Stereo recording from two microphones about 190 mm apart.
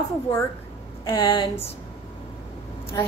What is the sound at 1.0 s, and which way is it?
Speech, 25° left (ahead or behind).